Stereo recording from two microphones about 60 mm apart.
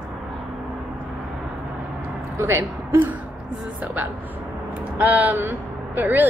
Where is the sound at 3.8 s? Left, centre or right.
Right.